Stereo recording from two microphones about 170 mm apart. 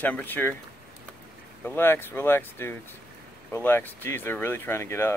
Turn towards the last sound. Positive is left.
turn(degrees=15)  # may be behind; listen again after turning